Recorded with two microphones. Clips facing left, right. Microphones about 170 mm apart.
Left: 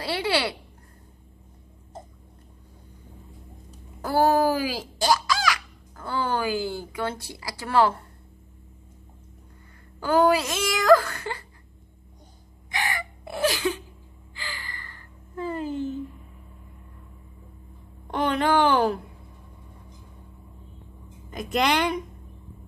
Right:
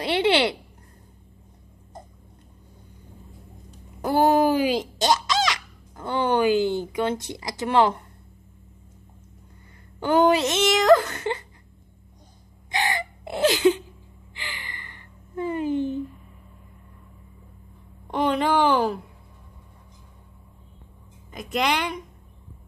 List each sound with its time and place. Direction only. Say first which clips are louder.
0.0 s speech: right 5 dB; 20° right (ahead or behind)
4.0 s speech: right 2 dB; 20° right (ahead or behind)
9.9 s speech: right 1 dB; 25° right (ahead or behind)
12.7 s gasp: right 4 dB; 30° right (ahead or behind)
18.0 s a woman's voice: right 1 dB; centre (ahead or behind)
21.5 s speech: left 1 dB; 10° right (ahead or behind)